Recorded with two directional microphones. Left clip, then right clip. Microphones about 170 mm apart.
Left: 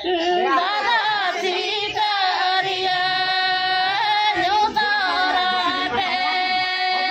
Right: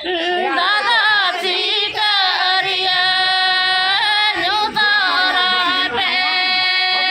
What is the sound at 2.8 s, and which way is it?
Female singing, 20° left (ahead or behind).